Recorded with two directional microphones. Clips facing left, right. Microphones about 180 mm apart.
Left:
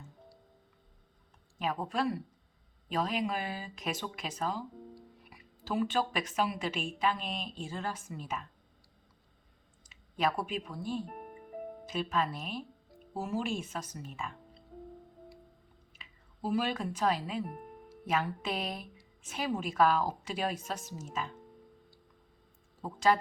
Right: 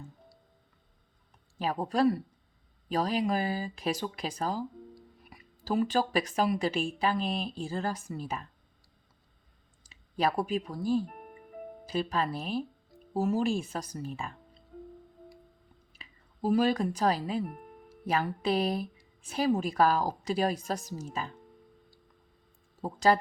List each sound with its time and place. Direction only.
1.5 s speech: 35° right (ahead or behind)
10.2 s speech: 35° right (ahead or behind)
16.0 s speech: 40° right (ahead or behind)
22.8 s speech: 35° right (ahead or behind)